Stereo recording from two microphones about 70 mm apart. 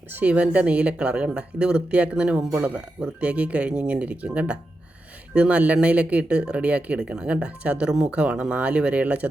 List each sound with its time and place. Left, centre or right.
0.1 s speech: right